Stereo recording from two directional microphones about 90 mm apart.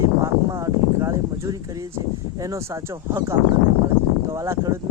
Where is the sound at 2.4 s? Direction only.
35° right (ahead or behind).